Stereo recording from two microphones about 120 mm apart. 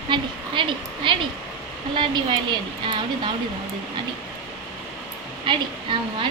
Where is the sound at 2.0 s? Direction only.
40° right (ahead or behind).